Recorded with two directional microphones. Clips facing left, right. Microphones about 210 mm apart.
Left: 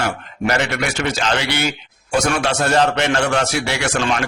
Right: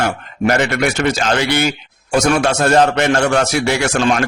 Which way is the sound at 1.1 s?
45° right (ahead or behind).